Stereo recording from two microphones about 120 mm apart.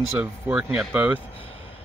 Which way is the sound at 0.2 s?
15° right (ahead or behind).